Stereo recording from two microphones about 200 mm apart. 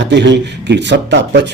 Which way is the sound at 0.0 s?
60° right (ahead or behind).